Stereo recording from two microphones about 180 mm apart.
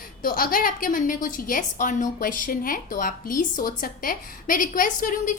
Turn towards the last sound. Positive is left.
turn(degrees=50)  # may be behind; listen again after turning